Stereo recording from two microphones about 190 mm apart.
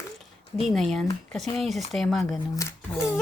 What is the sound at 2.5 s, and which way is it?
Speech, 15° left (ahead or behind).